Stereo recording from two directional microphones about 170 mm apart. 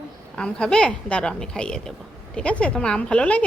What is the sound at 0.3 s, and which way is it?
A woman's voice, 5° left (ahead or behind).